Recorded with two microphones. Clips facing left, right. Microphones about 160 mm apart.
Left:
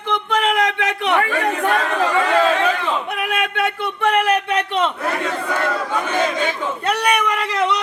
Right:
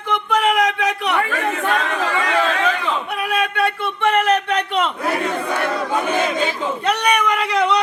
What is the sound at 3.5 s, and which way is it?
Speech, 15° left (ahead or behind).